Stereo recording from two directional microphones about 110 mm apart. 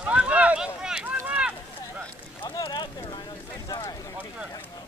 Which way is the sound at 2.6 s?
45° left (ahead or behind).